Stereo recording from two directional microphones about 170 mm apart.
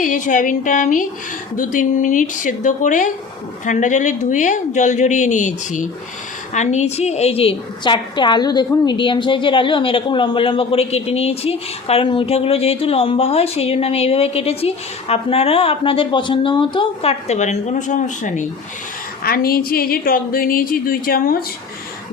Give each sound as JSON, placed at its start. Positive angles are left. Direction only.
{"t": 0.0, "sound": "a woman's voice", "side_deg": 50}
{"t": 19.2, "sound": "speech", "side_deg": 60}